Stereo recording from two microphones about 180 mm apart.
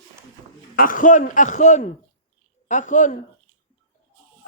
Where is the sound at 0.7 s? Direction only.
50° left (ahead or behind).